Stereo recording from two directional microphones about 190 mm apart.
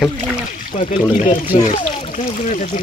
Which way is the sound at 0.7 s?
40° left (ahead or behind).